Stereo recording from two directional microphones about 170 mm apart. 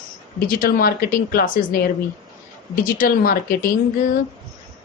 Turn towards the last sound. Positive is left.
turn(degrees=55)  # may be behind; listen again after turning